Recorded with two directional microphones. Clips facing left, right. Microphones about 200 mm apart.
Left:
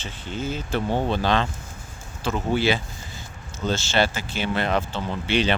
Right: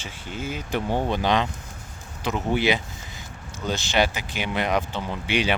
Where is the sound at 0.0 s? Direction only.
10° right (ahead or behind).